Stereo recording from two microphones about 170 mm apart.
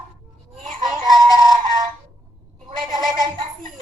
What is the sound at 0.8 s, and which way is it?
Synthetic singing, 25° right (ahead or behind).